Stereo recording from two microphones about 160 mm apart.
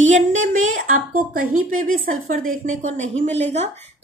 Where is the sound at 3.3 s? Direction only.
40° right (ahead or behind).